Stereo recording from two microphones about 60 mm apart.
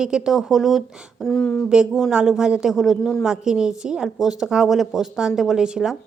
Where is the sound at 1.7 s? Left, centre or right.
Centre.